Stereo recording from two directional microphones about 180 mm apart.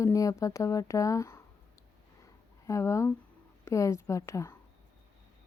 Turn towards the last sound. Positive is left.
turn(degrees=15)  # may be behind; listen again after turning